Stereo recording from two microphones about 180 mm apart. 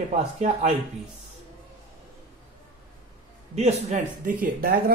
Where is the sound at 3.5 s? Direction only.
40° right (ahead or behind).